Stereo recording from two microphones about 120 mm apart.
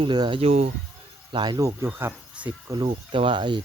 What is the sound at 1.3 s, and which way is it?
Speech, 35° right (ahead or behind).